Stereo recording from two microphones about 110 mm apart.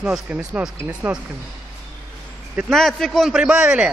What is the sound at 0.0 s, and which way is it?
A man's voice, 10° right (ahead or behind).